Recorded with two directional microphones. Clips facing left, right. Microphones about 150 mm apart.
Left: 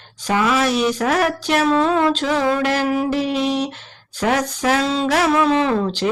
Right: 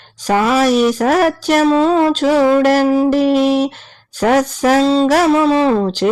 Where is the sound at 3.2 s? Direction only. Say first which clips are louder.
Right 8 dB; 45° right (ahead or behind).